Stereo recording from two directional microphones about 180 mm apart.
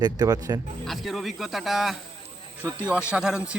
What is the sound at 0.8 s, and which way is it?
Speech, centre (ahead or behind).